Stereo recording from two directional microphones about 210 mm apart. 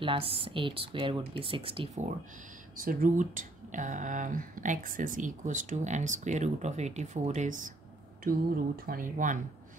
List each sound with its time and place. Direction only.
0.0 s speech: 25° right (ahead or behind)
2.7 s speech: 40° right (ahead or behind)